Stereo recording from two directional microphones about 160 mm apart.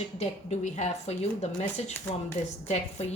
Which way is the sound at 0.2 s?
45° left (ahead or behind).